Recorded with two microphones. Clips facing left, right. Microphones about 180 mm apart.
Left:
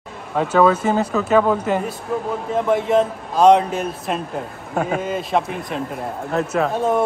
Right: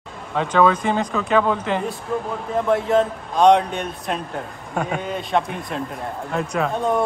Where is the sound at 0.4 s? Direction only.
5° left (ahead or behind).